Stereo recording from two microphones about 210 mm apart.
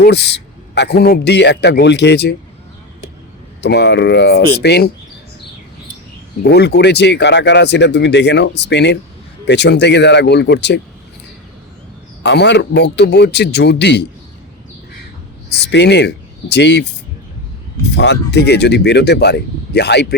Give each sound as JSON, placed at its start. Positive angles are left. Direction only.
{"t": 0.0, "sound": "a man's voice", "side_deg": 50}
{"t": 3.6, "sound": "a man's voice", "side_deg": 55}
{"t": 6.4, "sound": "speech", "side_deg": 50}
{"t": 12.2, "sound": "a man's voice", "side_deg": 55}
{"t": 15.5, "sound": "speech", "side_deg": 55}
{"t": 17.9, "sound": "a man's voice", "side_deg": 55}